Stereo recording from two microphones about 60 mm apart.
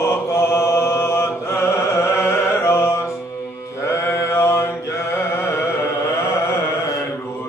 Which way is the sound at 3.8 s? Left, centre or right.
Left.